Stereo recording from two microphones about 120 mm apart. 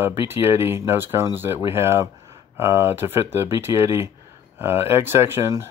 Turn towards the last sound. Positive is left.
turn(degrees=-20)  # may be behind; listen again after turning